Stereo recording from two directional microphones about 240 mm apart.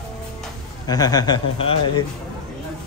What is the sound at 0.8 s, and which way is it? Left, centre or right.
A man's voice, centre.